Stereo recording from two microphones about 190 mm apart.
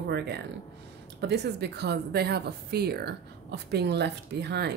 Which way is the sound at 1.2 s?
60° right (ahead or behind).